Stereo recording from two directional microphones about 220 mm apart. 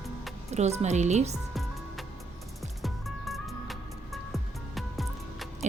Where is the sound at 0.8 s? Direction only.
30° right (ahead or behind).